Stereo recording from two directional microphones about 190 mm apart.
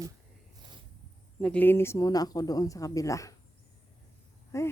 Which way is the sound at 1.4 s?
5° left (ahead or behind).